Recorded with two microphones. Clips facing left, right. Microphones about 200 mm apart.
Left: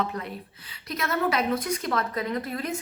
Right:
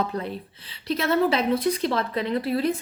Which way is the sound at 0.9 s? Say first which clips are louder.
Right 5 dB; 30° right (ahead or behind).